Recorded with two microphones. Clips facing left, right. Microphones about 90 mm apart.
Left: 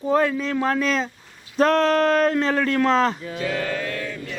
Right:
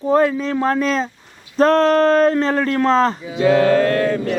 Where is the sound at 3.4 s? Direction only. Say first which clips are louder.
Right 12 dB; 60° right (ahead or behind).